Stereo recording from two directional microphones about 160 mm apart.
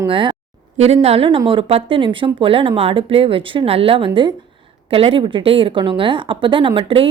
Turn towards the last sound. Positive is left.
turn(degrees=-30)  # may be behind; listen again after turning